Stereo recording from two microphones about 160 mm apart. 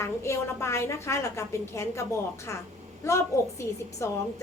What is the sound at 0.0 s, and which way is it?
A woman's voice, 15° left (ahead or behind).